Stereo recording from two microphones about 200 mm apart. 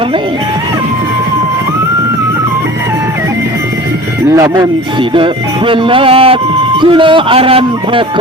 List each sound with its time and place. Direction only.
4.3 s speech: 15° right (ahead or behind)